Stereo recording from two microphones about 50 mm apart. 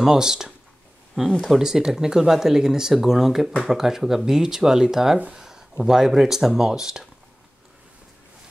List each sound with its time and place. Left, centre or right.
0.0 s speech: centre
1.6 s speech: centre